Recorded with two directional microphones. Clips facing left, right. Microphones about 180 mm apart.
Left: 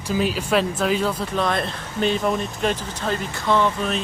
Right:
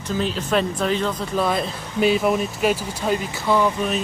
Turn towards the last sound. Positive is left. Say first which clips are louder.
# right 1 dB
turn(degrees=-10)  # may be behind; listen again after turning